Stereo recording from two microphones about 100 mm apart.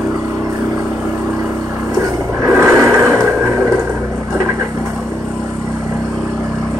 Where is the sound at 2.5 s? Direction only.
30° right (ahead or behind).